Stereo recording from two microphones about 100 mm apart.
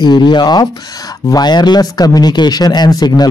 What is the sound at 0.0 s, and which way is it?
A man's voice, 50° left (ahead or behind).